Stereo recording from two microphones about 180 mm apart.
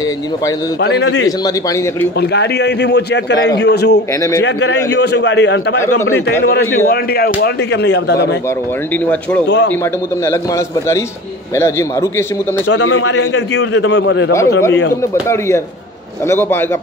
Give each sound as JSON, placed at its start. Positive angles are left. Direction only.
{"t": 0.7, "sound": "a man's voice", "side_deg": 75}
{"t": 7.3, "sound": "a man's voice", "side_deg": 70}
{"t": 11.5, "sound": "a man's voice", "side_deg": 15}
{"t": 12.6, "sound": "a man's voice", "side_deg": 85}
{"t": 15.2, "sound": "a man's voice", "side_deg": 15}